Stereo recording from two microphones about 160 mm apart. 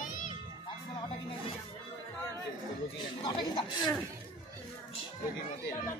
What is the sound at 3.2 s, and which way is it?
Speech, 30° left (ahead or behind).